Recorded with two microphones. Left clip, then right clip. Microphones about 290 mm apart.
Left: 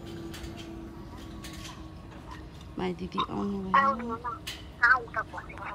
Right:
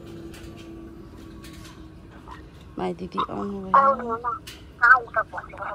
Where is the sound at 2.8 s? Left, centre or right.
Centre.